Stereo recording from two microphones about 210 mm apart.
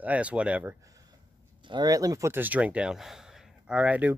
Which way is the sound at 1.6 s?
20° right (ahead or behind).